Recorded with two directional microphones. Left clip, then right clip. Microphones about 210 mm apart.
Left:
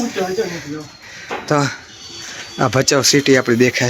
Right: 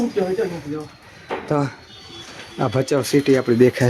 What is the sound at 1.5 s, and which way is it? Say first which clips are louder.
Speech: left 6 dB; centre (ahead or behind).